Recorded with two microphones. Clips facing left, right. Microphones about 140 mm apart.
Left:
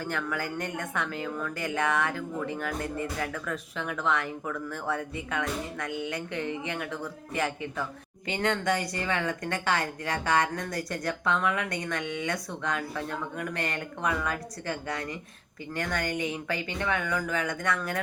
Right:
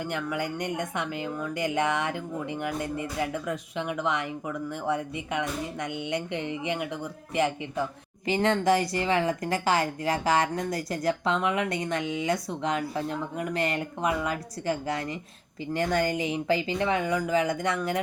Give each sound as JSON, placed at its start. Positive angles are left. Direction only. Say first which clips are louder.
{"t": 0.0, "sound": "a woman's voice", "louder": "right 2 dB", "side_deg": -15}